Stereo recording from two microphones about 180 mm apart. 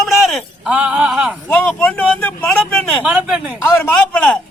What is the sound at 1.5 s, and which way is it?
Speech, 5° left (ahead or behind).